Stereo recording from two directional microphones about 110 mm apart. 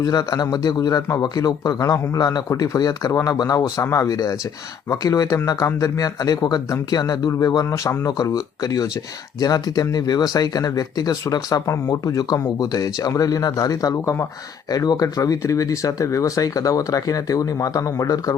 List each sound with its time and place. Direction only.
0.0 s speech: 35° left (ahead or behind)